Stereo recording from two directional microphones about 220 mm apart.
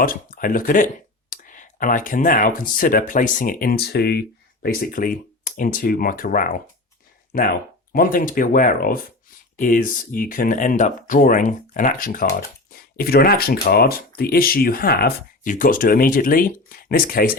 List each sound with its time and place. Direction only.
0.0 s speech: 40° left (ahead or behind)